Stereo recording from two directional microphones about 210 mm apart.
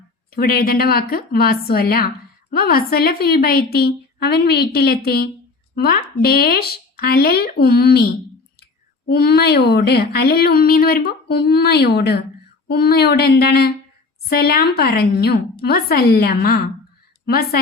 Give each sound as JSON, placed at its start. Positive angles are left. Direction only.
{"t": 0.3, "sound": "speech", "side_deg": 45}